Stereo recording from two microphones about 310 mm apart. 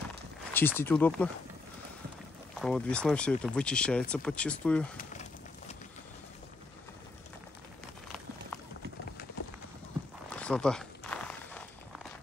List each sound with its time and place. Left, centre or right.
0.5 s speech: centre
2.6 s speech: centre
4.9 s a sound: left
10.3 s walk: centre